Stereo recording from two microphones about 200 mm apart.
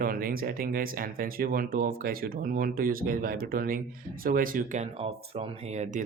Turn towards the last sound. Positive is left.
turn(degrees=-35)  # may be behind; listen again after turning